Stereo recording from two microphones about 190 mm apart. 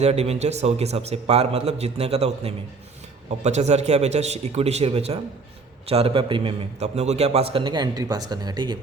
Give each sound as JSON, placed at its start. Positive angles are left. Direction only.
{"t": 0.0, "sound": "a man's voice", "side_deg": -35}